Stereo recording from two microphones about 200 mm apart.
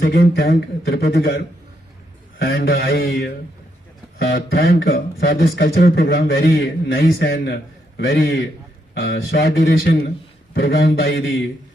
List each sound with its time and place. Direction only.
0.1 s speech: 55° left (ahead or behind)
2.4 s a man's voice: 50° left (ahead or behind)